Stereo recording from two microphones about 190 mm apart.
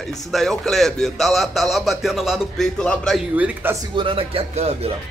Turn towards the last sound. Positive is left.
turn(degrees=-30)  # may be behind; listen again after turning